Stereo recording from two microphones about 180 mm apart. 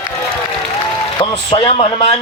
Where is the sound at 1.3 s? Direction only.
30° left (ahead or behind).